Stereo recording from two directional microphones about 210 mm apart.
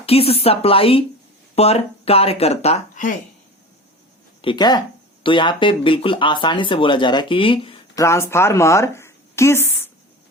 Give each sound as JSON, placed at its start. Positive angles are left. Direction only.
{"t": 0.0, "sound": "speech", "side_deg": 30}
{"t": 4.4, "sound": "speech", "side_deg": 20}
{"t": 8.0, "sound": "speech", "side_deg": 10}